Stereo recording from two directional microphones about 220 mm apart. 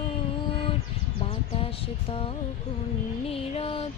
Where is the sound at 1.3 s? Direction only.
25° left (ahead or behind).